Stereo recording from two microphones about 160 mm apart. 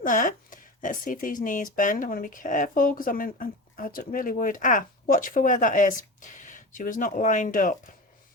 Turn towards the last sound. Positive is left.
turn(degrees=55)  # may be behind; listen again after turning